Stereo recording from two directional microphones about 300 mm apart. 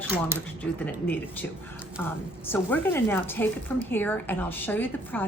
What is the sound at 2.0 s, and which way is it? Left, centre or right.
Speech, centre.